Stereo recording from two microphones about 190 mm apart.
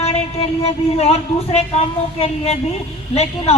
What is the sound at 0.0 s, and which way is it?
A woman's voice, 30° left (ahead or behind).